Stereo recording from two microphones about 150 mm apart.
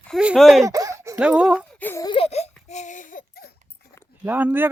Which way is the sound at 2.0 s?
40° left (ahead or behind).